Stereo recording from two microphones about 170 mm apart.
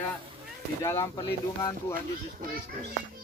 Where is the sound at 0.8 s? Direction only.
15° left (ahead or behind).